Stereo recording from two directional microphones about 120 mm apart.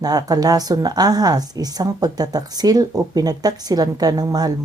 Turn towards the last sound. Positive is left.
turn(degrees=-35)  # may be behind; listen again after turning